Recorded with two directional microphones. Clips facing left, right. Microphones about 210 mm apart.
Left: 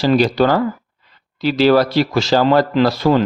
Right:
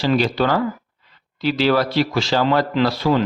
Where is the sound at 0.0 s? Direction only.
40° left (ahead or behind).